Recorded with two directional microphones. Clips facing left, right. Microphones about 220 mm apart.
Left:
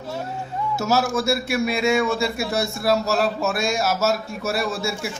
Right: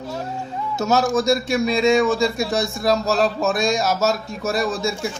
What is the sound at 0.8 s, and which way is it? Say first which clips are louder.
A man's voice: right 3 dB; 5° left (ahead or behind).